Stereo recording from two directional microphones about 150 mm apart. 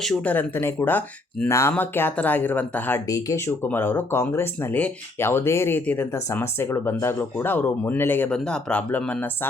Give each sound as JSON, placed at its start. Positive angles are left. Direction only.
{"t": 0.0, "sound": "speech", "side_deg": 5}
{"t": 3.1, "sound": "speech", "side_deg": 25}